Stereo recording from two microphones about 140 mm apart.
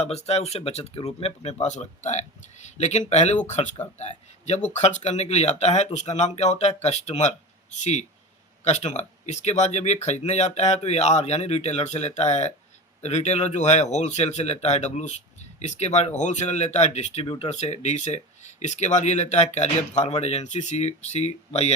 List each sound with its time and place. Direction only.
0.0 s speech: 50° left (ahead or behind)
17.2 s speech: 35° left (ahead or behind)
17.5 s speech: 55° left (ahead or behind)